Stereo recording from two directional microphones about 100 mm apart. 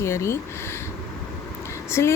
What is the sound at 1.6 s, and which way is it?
Vehicle, 25° left (ahead or behind).